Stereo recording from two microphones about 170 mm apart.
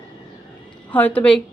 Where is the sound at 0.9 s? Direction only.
10° left (ahead or behind).